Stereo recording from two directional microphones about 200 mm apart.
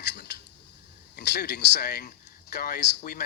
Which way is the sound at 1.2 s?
55° left (ahead or behind).